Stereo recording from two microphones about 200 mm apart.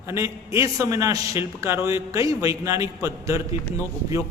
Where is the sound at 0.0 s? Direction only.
15° right (ahead or behind).